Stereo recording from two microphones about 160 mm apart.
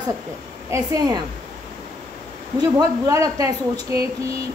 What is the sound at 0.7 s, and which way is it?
Speech, 25° right (ahead or behind).